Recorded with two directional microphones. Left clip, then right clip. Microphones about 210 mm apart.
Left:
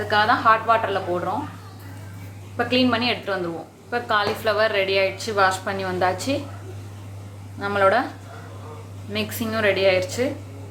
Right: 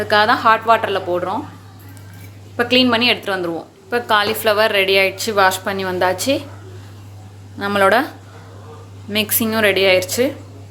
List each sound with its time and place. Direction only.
0.1 s a woman's voice: 50° right (ahead or behind)
2.6 s a woman's voice: 50° right (ahead or behind)
7.6 s a woman's voice: 45° right (ahead or behind)
9.1 s a woman's voice: 50° right (ahead or behind)